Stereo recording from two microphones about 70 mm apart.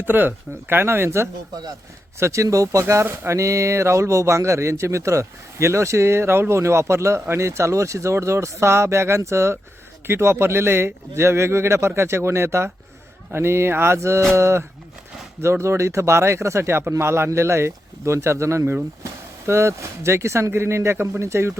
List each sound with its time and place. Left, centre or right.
0.0 s a man's voice: right